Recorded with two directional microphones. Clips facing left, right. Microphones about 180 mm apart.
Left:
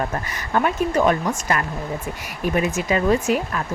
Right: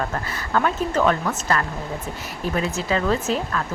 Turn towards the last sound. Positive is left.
turn(degrees=15)  # may be behind; listen again after turning